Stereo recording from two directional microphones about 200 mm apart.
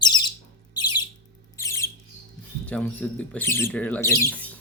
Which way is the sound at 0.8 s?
20° left (ahead or behind).